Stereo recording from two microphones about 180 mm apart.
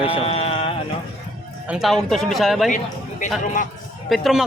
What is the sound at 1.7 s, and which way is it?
Speech, centre (ahead or behind).